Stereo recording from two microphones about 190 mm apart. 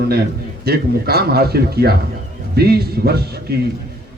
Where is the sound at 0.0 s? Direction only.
55° right (ahead or behind).